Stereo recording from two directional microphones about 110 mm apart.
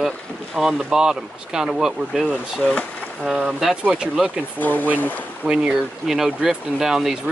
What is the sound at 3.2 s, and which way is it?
Speech, 5° right (ahead or behind).